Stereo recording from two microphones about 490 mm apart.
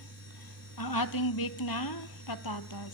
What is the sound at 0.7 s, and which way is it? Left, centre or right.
A woman's voice, left.